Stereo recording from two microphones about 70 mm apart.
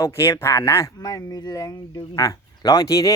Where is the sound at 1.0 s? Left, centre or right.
Left.